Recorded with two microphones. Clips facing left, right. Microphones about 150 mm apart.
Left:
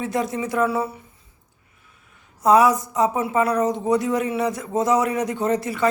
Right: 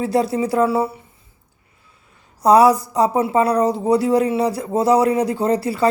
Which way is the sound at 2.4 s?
35° right (ahead or behind).